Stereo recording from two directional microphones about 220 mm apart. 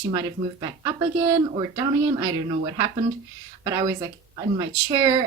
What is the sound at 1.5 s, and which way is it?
Speech, 20° right (ahead or behind).